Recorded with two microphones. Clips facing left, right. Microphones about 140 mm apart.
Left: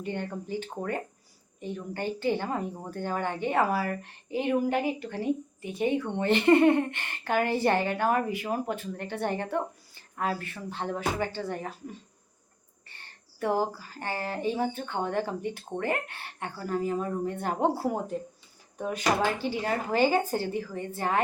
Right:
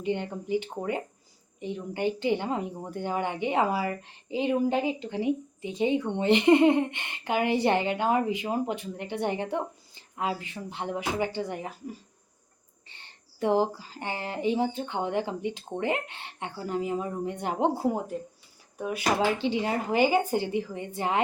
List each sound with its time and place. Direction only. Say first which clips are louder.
0.0 s speech: right 3 dB; 20° right (ahead or behind)
19.4 s speech: right 2 dB; 20° right (ahead or behind)